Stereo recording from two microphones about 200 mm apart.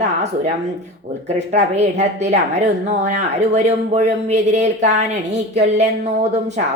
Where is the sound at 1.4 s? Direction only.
35° right (ahead or behind).